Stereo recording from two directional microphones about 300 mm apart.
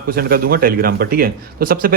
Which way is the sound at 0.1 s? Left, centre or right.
Right.